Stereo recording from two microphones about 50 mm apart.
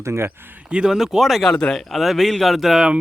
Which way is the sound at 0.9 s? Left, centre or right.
Centre.